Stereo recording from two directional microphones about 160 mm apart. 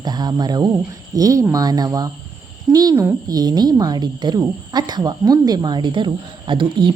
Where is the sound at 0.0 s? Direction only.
25° right (ahead or behind).